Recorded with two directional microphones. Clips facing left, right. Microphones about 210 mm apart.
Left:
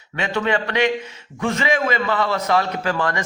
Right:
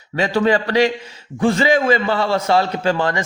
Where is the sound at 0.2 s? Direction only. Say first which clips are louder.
Right 5 dB; 35° right (ahead or behind).